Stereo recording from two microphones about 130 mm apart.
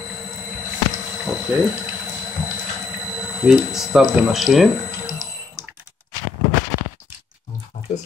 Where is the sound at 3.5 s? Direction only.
5° right (ahead or behind).